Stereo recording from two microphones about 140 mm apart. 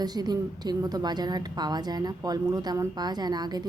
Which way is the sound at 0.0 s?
30° right (ahead or behind).